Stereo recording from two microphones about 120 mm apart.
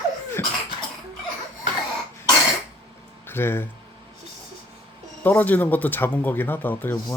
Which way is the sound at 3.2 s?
20° left (ahead or behind).